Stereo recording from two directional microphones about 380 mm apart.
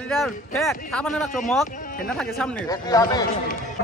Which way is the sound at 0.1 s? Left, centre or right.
Centre.